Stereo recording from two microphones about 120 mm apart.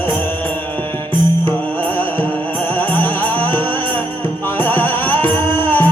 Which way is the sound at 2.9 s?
15° left (ahead or behind).